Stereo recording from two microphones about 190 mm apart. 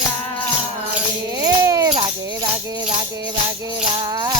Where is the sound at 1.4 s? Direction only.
15° right (ahead or behind).